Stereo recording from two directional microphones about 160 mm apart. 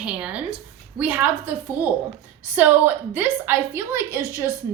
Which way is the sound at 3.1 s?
10° right (ahead or behind).